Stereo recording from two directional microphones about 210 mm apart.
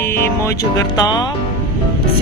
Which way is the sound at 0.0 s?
10° left (ahead or behind).